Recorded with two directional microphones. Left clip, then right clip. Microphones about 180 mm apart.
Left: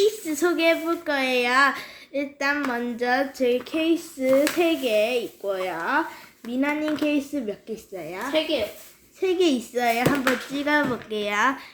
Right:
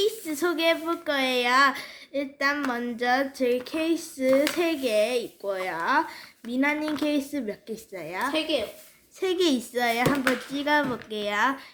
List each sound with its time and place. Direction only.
0.0 s a woman's voice: 10° right (ahead or behind)